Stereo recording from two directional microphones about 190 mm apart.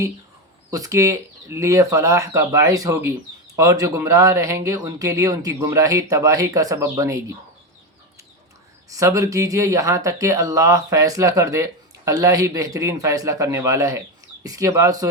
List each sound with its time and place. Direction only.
0.7 s speech: 15° right (ahead or behind)
8.9 s speech: 15° right (ahead or behind)